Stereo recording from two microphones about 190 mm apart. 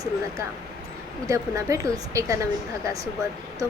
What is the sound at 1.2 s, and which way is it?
A woman's voice, 15° right (ahead or behind).